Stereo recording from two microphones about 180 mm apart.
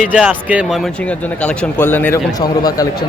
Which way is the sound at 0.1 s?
5° right (ahead or behind).